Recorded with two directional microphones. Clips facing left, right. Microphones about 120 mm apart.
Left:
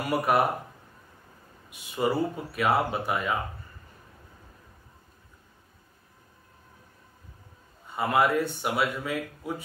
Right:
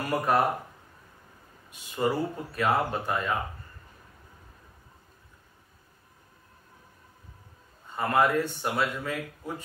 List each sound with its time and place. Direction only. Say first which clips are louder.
0.0 s speech: left 1 dB; 10° left (ahead or behind)
1.7 s speech: left 1 dB; 10° left (ahead or behind)
7.9 s speech: even; 10° left (ahead or behind)